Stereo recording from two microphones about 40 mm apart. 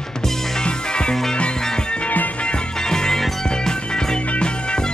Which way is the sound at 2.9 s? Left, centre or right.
Centre.